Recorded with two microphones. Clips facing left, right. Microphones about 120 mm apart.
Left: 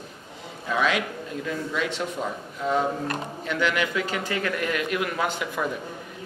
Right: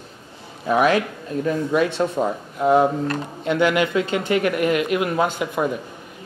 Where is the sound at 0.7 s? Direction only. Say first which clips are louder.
Right 7 dB; 45° right (ahead or behind).